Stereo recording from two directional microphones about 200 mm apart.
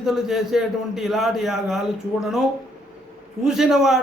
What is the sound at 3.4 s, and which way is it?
Speech, centre (ahead or behind).